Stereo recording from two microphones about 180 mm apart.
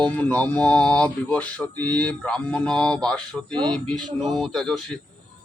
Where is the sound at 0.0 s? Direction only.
10° left (ahead or behind).